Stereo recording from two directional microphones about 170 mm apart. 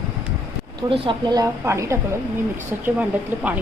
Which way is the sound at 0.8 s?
25° right (ahead or behind).